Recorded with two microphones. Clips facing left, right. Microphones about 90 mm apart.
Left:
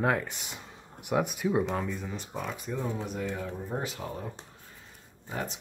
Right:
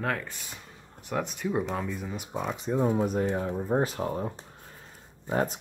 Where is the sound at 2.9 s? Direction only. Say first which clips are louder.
Right 7 dB; 45° right (ahead or behind).